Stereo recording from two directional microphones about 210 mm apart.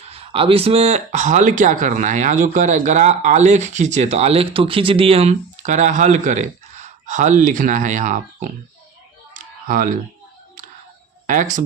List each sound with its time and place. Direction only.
0.1 s speech: 25° right (ahead or behind)
9.3 s a sound: 40° right (ahead or behind)
11.3 s speech: 35° right (ahead or behind)